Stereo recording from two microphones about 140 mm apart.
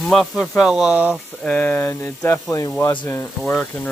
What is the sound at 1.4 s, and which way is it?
Speech, 10° left (ahead or behind).